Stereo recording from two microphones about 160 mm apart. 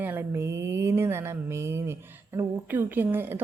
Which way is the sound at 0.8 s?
15° right (ahead or behind).